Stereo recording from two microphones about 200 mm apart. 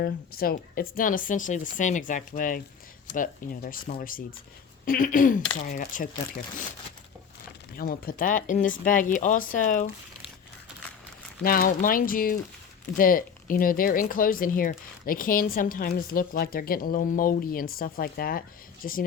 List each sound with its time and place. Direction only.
0.0 s speech: 50° left (ahead or behind)
7.7 s speech: 45° left (ahead or behind)
11.4 s speech: 45° left (ahead or behind)